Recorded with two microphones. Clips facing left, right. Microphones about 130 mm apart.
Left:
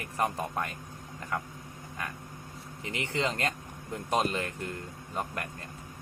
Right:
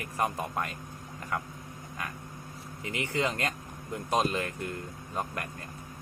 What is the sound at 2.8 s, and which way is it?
Speech, 30° left (ahead or behind).